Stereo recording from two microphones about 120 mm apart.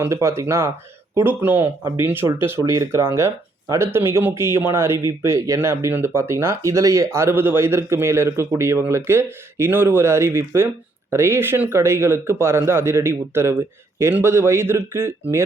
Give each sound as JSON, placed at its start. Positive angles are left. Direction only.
{"t": 0.0, "sound": "speech", "side_deg": -25}